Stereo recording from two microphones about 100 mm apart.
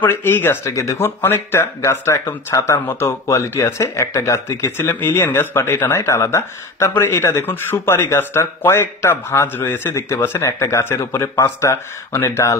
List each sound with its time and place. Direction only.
0.0 s speech: 20° left (ahead or behind)